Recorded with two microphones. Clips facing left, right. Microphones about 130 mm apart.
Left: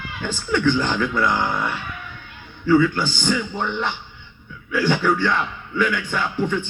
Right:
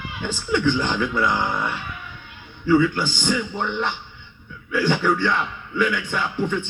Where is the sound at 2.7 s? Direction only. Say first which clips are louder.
Left 1 dB; 45° left (ahead or behind).